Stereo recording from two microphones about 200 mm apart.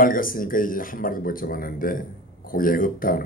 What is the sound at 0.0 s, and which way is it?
Speech, 45° left (ahead or behind).